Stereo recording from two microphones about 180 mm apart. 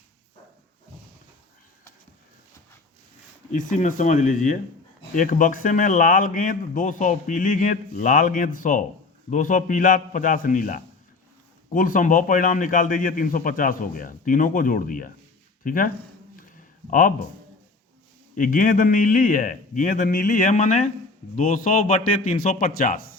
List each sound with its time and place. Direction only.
3.5 s speech: 45° left (ahead or behind)
16.9 s speech: 50° left (ahead or behind)
18.3 s speech: 50° left (ahead or behind)